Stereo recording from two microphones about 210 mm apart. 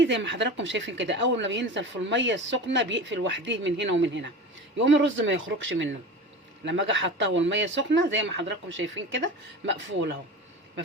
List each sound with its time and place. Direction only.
0.0 s speech: 60° right (ahead or behind)